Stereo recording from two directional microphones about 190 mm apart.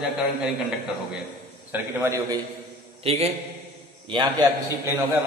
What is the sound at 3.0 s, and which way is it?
A man's voice, 30° right (ahead or behind).